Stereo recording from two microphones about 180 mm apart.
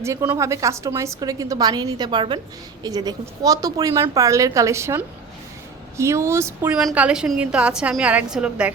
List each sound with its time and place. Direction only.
0.0 s a woman's voice: 15° right (ahead or behind)